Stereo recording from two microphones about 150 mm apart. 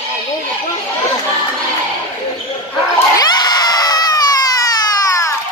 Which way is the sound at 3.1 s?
25° left (ahead or behind).